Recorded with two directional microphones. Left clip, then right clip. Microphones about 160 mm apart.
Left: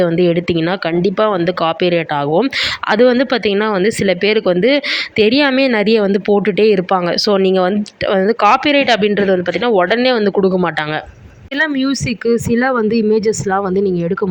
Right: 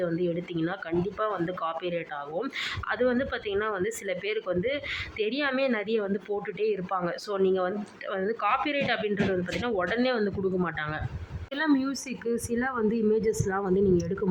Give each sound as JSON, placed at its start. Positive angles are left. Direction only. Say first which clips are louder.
{"t": 0.0, "sound": "speech", "louder": "left 16 dB", "side_deg": 40}